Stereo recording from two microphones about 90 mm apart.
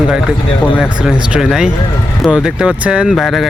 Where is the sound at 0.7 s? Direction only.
5° right (ahead or behind).